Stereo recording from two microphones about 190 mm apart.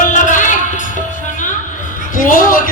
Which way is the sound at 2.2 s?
45° left (ahead or behind).